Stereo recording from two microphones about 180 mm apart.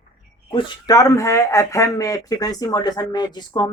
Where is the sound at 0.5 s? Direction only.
20° left (ahead or behind).